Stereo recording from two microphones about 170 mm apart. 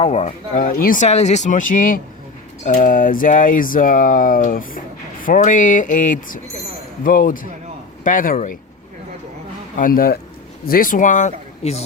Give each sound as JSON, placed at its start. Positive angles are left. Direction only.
{"t": 0.0, "sound": "speech", "side_deg": 40}
{"t": 9.7, "sound": "speech", "side_deg": 55}